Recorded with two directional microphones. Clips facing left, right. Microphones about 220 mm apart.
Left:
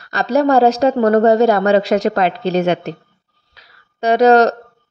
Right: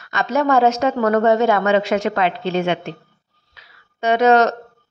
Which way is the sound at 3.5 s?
35° left (ahead or behind).